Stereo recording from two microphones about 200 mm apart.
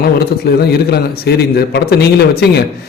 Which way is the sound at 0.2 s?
55° left (ahead or behind).